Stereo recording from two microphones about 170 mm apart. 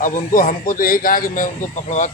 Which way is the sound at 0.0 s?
50° left (ahead or behind).